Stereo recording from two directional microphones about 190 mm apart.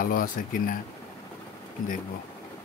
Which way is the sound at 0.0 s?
50° left (ahead or behind).